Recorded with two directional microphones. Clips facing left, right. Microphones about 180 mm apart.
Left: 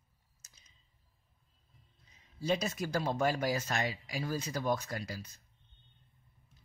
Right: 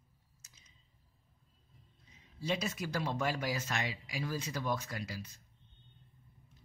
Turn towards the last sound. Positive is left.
turn(degrees=40)  # may be behind; listen again after turning